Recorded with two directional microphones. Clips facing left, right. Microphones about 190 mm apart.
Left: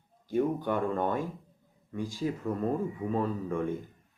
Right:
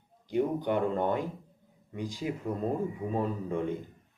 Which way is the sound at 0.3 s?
20° right (ahead or behind).